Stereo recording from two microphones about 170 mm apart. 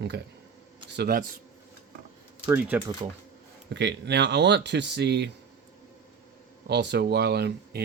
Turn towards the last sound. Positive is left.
turn(degrees=-70)  # may be behind; listen again after turning